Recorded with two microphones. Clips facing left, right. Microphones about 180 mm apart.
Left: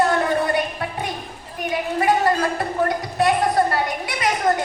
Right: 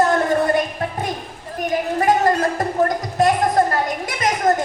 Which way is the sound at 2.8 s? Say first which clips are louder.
Right 1 dB; 45° right (ahead or behind).